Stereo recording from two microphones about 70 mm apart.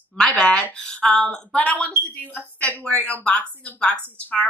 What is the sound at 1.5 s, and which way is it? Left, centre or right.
Speech, left.